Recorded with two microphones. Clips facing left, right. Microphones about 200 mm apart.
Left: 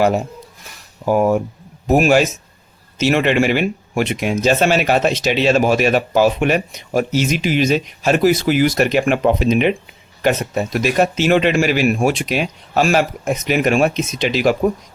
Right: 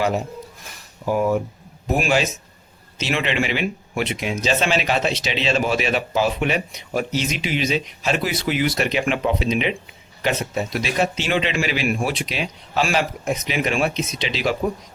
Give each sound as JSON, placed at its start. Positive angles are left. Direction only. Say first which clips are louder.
{"t": 1.0, "sound": "speech", "louder": "left 5 dB", "side_deg": 45}